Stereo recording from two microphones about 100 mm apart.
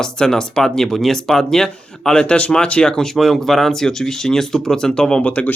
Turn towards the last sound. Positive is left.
turn(degrees=15)  # may be behind; listen again after turning